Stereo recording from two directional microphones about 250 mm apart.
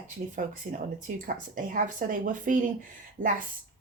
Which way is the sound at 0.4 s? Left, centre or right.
Right.